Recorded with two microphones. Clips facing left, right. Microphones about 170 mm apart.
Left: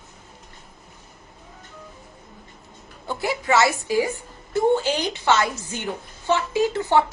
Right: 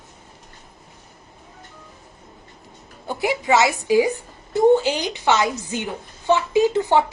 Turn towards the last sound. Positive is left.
turn(degrees=-15)  # may be behind; listen again after turning